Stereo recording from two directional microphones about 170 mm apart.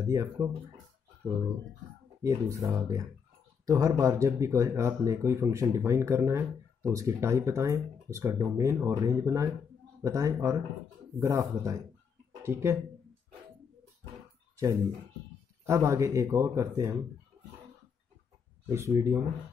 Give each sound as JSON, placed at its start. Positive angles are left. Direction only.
{"t": 0.0, "sound": "speech", "side_deg": -20}
{"t": 2.2, "sound": "speech", "side_deg": -20}
{"t": 15.6, "sound": "speech", "side_deg": -15}
{"t": 18.7, "sound": "speech", "side_deg": -15}